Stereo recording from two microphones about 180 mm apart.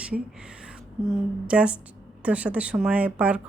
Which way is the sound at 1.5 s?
5° right (ahead or behind).